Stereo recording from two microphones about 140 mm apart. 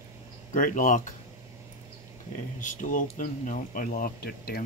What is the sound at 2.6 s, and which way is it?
Speech, 65° left (ahead or behind).